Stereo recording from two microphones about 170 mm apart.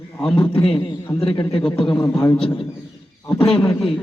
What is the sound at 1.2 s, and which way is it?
Speech, 35° left (ahead or behind).